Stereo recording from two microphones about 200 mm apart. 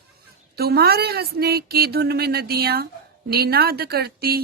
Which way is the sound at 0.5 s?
50° right (ahead or behind).